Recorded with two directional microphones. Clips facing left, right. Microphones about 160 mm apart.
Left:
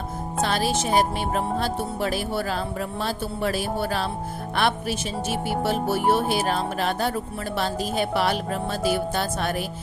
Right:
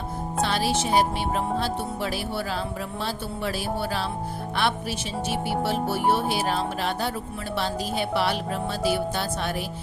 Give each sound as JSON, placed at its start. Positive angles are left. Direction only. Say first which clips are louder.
{"t": 0.4, "sound": "speech", "louder": "left 1 dB", "side_deg": 45}
{"t": 6.1, "sound": "speech", "louder": "left 2 dB", "side_deg": 50}